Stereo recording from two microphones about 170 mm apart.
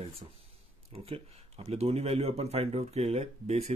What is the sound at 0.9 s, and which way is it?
Speech, 35° right (ahead or behind).